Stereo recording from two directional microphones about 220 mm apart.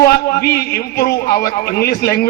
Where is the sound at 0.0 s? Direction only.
45° left (ahead or behind).